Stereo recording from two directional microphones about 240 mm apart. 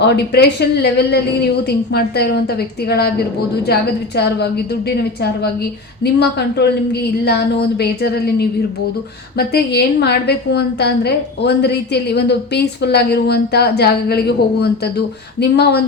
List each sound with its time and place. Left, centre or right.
0.0 s a woman's voice: left
3.7 s a woman's voice: left